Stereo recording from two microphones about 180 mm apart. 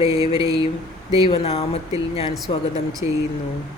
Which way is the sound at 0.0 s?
30° left (ahead or behind).